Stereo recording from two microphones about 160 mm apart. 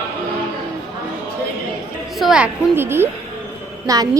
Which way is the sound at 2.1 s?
5° right (ahead or behind).